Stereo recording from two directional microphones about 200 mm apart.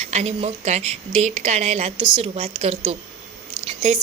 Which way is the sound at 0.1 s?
35° right (ahead or behind).